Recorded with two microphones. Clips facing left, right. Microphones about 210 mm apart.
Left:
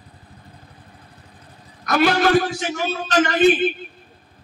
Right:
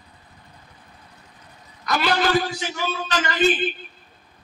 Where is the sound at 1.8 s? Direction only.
50° left (ahead or behind).